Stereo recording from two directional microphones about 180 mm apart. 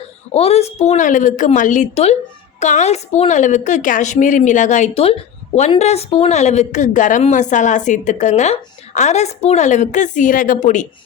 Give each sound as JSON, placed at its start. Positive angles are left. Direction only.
{"t": 0.3, "sound": "a woman's voice", "side_deg": 35}